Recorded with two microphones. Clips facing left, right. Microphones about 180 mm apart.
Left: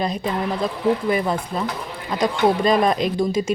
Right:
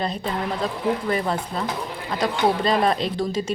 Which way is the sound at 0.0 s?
10° left (ahead or behind).